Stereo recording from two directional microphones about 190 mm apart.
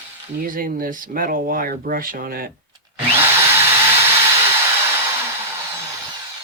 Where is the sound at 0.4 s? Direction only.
45° right (ahead or behind).